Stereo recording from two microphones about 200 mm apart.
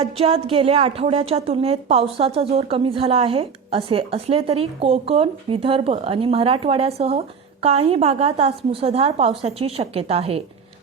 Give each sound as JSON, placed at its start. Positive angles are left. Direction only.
{"t": 0.0, "sound": "a woman's voice", "side_deg": -30}